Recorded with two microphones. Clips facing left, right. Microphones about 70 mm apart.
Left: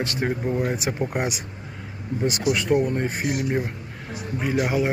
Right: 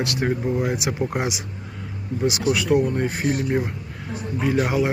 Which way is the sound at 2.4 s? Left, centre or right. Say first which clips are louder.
Right 1 dB; centre.